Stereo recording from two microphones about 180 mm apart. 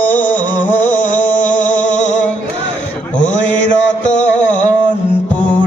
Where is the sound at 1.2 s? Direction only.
45° left (ahead or behind).